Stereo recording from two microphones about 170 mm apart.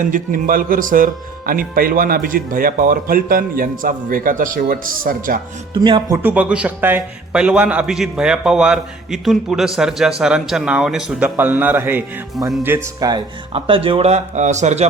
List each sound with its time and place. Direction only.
0.0 s speech: 50° right (ahead or behind)
5.7 s speech: 30° right (ahead or behind)
6.2 s a man's voice: 10° right (ahead or behind); by 14.8 s 40° right (ahead or behind)